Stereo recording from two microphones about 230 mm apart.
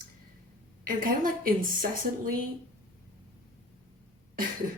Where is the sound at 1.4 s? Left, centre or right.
Right.